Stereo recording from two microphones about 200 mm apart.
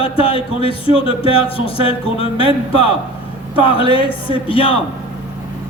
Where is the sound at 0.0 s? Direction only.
25° left (ahead or behind).